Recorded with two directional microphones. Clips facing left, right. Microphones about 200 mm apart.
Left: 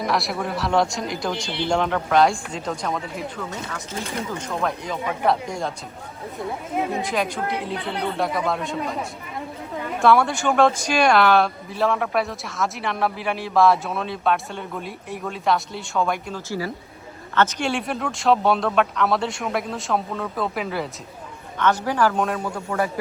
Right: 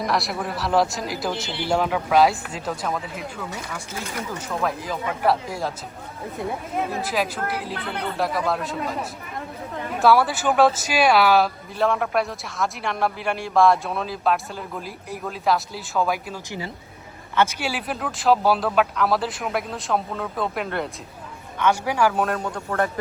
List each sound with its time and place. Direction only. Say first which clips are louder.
0.0 s speech: left 1 dB; centre (ahead or behind)
7.0 s speech: left 1 dB; 5° right (ahead or behind)
16.5 s speech: left 6 dB; 20° right (ahead or behind)
17.3 s speech: left 1 dB; 10° right (ahead or behind)
21.6 s a man's voice: even; 10° right (ahead or behind)
22.5 s a man's voice: even; 5° left (ahead or behind)